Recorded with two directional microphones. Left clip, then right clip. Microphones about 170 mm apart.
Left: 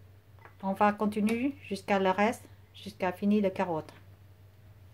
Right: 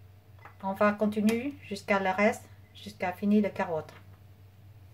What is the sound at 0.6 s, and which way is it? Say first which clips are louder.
Speech: even; 40° left (ahead or behind).